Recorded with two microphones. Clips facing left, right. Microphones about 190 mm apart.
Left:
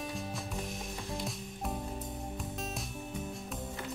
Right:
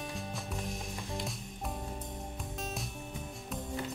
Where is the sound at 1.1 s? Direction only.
Centre (ahead or behind).